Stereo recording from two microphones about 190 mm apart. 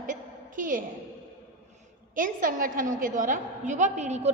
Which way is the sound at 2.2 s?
45° right (ahead or behind).